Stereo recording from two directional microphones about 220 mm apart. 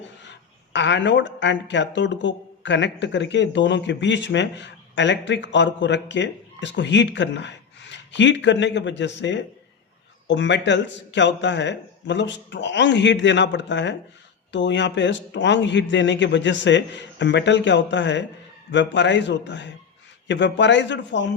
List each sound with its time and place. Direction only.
0.2 s speech: 55° left (ahead or behind)